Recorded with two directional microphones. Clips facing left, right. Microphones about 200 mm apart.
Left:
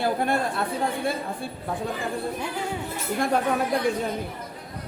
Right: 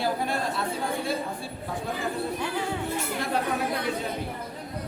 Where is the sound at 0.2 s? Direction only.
55° left (ahead or behind).